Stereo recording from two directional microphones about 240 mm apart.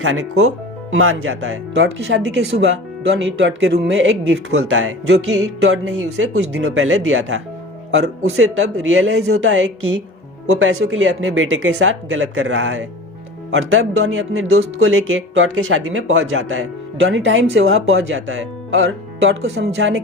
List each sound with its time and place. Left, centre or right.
0.0 s speech: right